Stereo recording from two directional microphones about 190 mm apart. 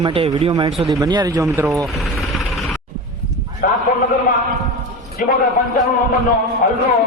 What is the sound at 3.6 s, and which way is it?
Speech, 45° left (ahead or behind).